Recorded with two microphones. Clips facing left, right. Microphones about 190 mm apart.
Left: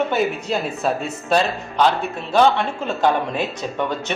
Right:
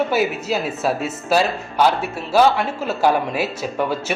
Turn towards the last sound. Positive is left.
turn(degrees=-5)  # may be behind; listen again after turning